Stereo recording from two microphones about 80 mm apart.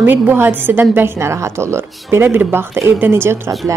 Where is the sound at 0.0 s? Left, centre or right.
Right.